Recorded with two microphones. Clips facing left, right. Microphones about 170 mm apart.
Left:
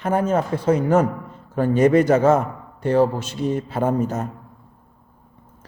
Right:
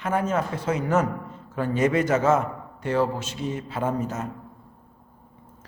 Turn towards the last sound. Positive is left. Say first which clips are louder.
# left 6 dB
turn(degrees=40)  # may be behind; listen again after turning